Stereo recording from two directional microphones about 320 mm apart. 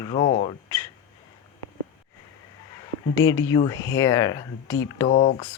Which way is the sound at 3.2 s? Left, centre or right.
Centre.